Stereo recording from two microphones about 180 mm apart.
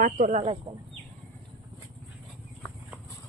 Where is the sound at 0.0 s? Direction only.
40° right (ahead or behind).